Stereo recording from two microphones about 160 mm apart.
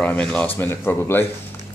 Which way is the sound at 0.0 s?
10° left (ahead or behind).